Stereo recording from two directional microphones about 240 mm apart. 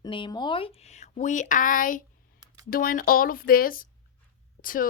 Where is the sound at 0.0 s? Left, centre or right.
Centre.